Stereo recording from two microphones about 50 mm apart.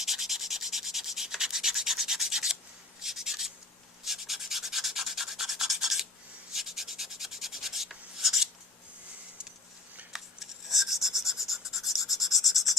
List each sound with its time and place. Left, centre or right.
0.0 s rub: centre
10.1 s filing: centre